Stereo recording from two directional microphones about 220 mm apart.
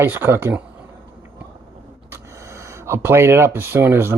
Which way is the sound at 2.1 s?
15° right (ahead or behind).